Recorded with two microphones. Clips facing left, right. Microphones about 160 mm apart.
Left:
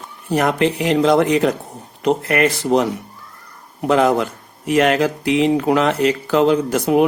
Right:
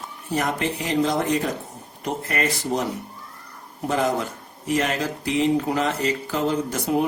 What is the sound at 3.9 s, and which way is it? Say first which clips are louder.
Speech: left 8 dB; 70° left (ahead or behind).